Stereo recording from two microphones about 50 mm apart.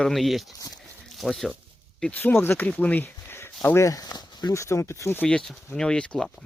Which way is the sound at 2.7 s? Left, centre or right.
Left.